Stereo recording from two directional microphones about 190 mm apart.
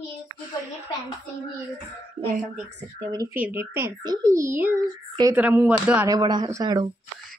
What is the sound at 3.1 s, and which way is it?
A child's voice, 15° right (ahead or behind).